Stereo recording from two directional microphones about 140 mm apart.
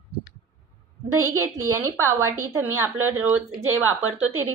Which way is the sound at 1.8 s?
20° right (ahead or behind).